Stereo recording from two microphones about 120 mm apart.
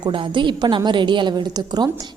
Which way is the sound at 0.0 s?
45° right (ahead or behind).